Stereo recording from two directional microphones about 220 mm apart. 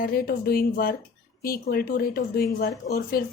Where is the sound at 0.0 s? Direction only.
45° left (ahead or behind).